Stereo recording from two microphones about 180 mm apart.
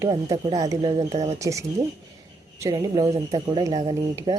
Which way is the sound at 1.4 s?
15° right (ahead or behind).